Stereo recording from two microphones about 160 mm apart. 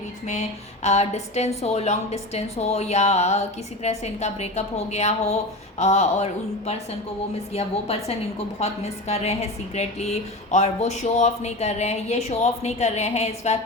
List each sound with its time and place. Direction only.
0.3 s a woman's voice: 45° left (ahead or behind)